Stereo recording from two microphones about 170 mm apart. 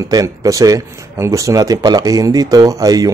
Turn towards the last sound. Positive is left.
turn(degrees=-20)  # may be behind; listen again after turning